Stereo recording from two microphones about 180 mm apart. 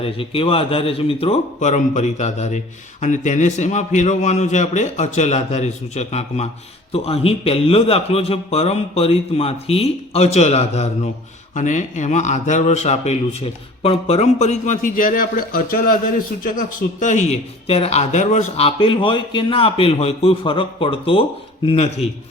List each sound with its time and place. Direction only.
0.0 s speech: 30° left (ahead or behind)